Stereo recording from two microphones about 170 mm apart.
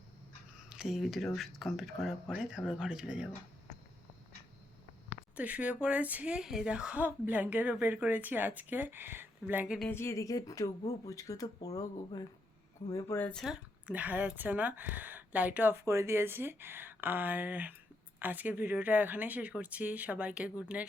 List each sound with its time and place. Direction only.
0.7 s speech: 5° right (ahead or behind)
5.4 s speech: 10° right (ahead or behind)
9.9 s speech: 15° left (ahead or behind)
13.4 s speech: 5° right (ahead or behind)